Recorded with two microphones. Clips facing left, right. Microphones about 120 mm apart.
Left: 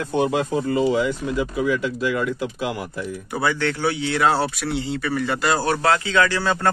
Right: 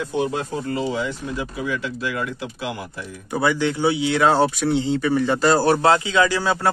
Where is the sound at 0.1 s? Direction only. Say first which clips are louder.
Left 4 dB; 65° left (ahead or behind).